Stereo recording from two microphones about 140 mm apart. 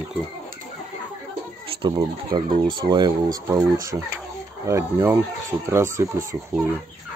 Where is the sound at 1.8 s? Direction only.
30° right (ahead or behind).